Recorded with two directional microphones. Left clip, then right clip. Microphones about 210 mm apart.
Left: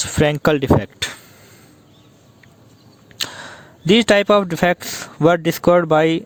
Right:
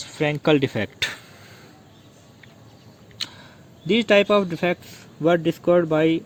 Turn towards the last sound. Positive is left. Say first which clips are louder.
# left 5 dB
turn(degrees=50)  # may be behind; listen again after turning